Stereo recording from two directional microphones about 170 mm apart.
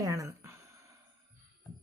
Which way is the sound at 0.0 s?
20° right (ahead or behind).